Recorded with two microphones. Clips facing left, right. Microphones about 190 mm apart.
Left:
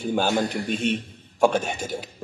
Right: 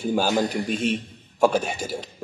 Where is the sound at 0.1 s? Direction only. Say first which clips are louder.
Right 1 dB; 5° right (ahead or behind).